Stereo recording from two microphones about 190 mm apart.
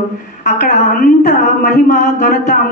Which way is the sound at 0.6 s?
40° left (ahead or behind).